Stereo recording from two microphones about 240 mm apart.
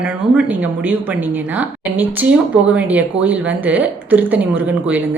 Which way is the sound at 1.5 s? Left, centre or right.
Centre.